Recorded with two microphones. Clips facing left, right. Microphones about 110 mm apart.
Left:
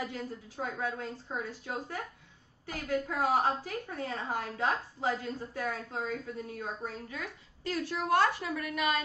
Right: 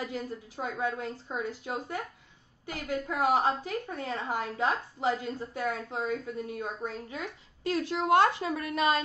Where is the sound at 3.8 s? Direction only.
25° right (ahead or behind).